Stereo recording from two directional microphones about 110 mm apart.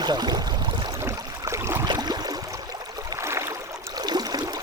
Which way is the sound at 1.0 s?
25° right (ahead or behind).